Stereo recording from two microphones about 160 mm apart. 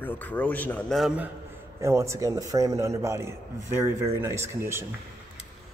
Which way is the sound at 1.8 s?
20° right (ahead or behind).